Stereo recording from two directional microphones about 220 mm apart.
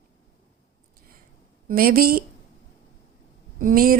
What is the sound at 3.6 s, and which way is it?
Speech, 40° right (ahead or behind).